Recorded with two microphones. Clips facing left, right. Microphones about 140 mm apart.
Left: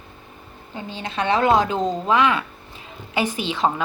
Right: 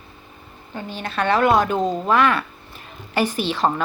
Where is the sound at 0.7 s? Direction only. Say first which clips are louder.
Right 1 dB; 20° left (ahead or behind).